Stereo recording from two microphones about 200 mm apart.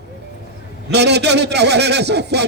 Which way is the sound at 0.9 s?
55° right (ahead or behind).